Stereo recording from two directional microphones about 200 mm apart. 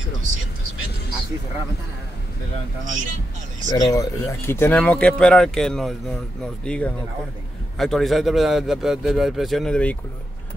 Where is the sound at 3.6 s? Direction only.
20° left (ahead or behind).